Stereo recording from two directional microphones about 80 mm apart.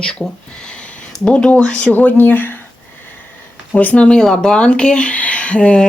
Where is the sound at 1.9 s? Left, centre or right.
Left.